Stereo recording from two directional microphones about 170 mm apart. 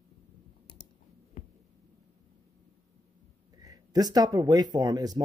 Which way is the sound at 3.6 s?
20° right (ahead or behind).